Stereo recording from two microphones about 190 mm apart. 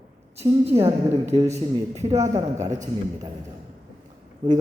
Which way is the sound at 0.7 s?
30° right (ahead or behind).